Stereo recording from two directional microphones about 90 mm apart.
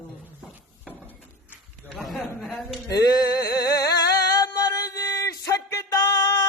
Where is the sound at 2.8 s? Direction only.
40° left (ahead or behind).